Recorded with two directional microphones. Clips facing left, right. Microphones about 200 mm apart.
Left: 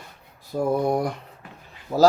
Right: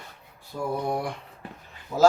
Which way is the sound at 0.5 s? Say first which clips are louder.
Left 6 dB; 40° left (ahead or behind).